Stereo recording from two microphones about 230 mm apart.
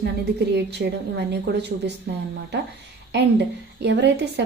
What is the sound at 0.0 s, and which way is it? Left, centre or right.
Speech, right.